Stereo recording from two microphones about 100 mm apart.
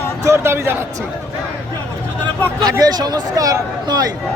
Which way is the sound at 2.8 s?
40° right (ahead or behind).